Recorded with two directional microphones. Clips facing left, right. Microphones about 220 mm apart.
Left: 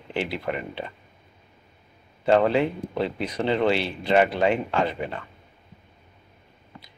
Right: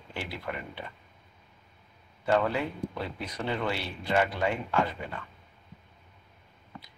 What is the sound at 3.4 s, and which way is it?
Speech, 30° left (ahead or behind).